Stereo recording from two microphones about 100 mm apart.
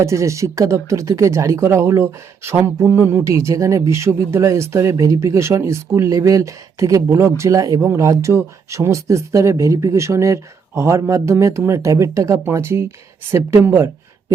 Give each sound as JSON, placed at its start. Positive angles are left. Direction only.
{"t": 0.0, "sound": "speech", "side_deg": -30}